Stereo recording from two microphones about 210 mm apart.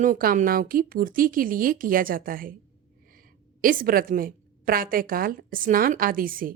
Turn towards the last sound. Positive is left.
turn(degrees=-40)  # may be behind; listen again after turning